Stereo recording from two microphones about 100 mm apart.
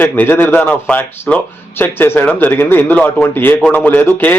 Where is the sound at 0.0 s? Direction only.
20° left (ahead or behind).